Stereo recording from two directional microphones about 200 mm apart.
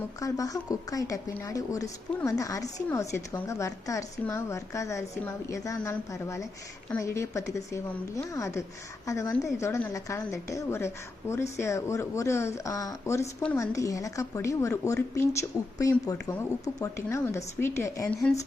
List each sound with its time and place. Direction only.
0.2 s speech: 15° left (ahead or behind)
18.1 s speech: centre (ahead or behind)